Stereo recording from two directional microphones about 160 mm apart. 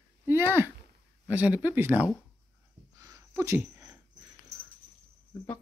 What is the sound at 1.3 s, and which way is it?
Speech, 10° right (ahead or behind).